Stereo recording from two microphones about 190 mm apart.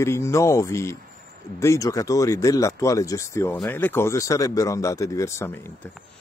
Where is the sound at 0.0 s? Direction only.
15° left (ahead or behind).